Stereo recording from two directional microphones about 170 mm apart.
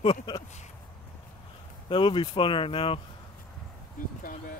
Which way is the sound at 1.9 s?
30° left (ahead or behind).